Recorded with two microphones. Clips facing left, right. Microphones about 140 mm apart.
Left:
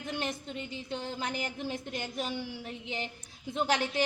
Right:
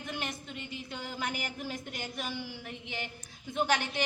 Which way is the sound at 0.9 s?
25° left (ahead or behind).